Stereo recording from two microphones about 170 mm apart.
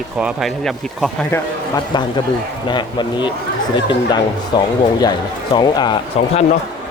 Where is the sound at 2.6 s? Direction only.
25° left (ahead or behind).